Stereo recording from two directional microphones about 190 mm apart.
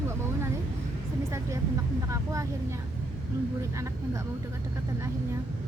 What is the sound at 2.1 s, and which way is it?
Vehicle, 15° right (ahead or behind).